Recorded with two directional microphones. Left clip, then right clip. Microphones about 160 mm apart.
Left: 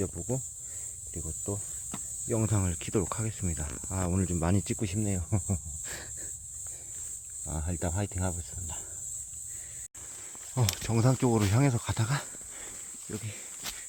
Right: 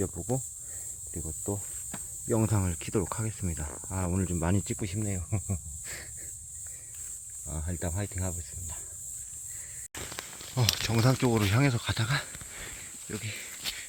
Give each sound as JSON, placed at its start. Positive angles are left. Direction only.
{"t": 0.0, "sound": "speech", "side_deg": -10}
{"t": 2.2, "sound": "speech", "side_deg": -25}
{"t": 2.5, "sound": "speech", "side_deg": 0}
{"t": 4.6, "sound": "speech", "side_deg": 25}
{"t": 7.4, "sound": "speech", "side_deg": 20}
{"t": 10.5, "sound": "speech", "side_deg": 10}
{"t": 11.6, "sound": "speech", "side_deg": 15}
{"t": 13.1, "sound": "snake", "side_deg": 0}